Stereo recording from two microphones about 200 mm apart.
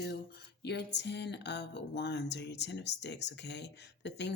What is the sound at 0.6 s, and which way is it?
Speech, 55° left (ahead or behind).